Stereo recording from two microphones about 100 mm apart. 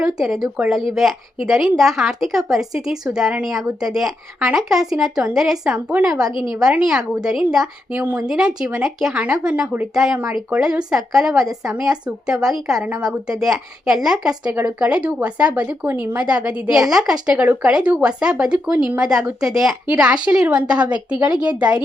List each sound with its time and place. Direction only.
0.0 s a woman's voice: 5° right (ahead or behind)
7.9 s a woman's voice: 15° right (ahead or behind)
17.4 s speech: 20° right (ahead or behind)
17.7 s a woman's voice: 10° right (ahead or behind)